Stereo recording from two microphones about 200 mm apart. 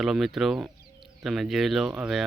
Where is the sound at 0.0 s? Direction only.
Centre (ahead or behind).